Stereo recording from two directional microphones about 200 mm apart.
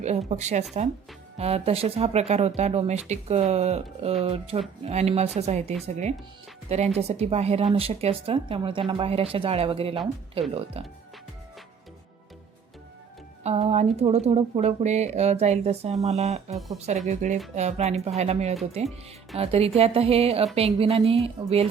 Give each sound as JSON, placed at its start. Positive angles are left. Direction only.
{"t": 0.3, "sound": "speech", "side_deg": -35}
{"t": 13.4, "sound": "speech", "side_deg": -35}